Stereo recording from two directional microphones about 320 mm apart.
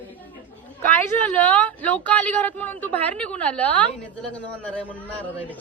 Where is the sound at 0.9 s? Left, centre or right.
Centre.